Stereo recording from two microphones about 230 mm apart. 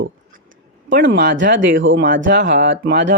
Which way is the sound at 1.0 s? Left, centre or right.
Right.